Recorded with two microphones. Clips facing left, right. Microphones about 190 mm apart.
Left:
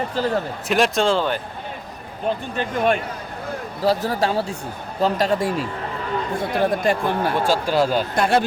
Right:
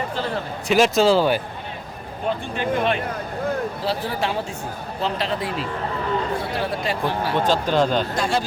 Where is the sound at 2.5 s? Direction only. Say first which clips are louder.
Left 1 dB; 45° left (ahead or behind).